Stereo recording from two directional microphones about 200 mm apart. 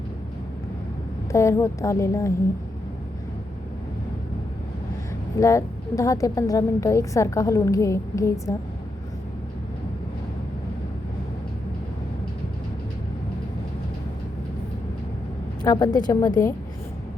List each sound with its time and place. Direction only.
1.3 s a woman's voice: 15° left (ahead or behind)
5.4 s a woman's voice: 15° left (ahead or behind)
15.6 s a woman's voice: 20° left (ahead or behind)